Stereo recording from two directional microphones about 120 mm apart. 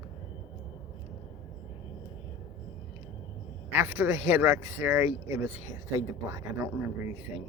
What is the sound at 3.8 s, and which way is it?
A woman's voice, 20° right (ahead or behind).